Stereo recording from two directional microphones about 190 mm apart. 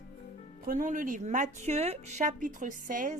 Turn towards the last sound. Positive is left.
turn(degrees=-45)  # may be behind; listen again after turning